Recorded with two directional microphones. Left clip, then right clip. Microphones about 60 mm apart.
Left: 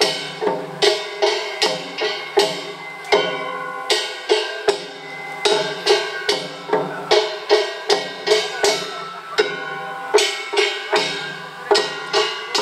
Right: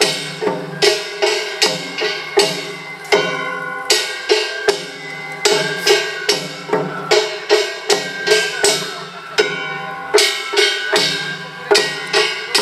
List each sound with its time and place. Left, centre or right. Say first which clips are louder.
0.0 s music: right 2 dB; centre
9.4 s a sound: right 3 dB; centre
10.1 s music: right 3 dB; centre